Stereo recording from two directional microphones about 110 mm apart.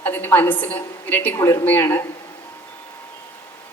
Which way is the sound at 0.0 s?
20° left (ahead or behind).